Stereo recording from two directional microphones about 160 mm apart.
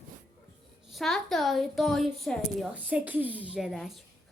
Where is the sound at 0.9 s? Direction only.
Centre (ahead or behind).